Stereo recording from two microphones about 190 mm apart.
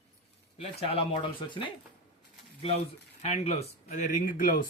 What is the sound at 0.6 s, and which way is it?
Speech, 30° left (ahead or behind).